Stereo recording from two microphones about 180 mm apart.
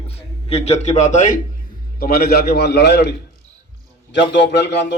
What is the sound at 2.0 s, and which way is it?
A man's voice, 60° left (ahead or behind).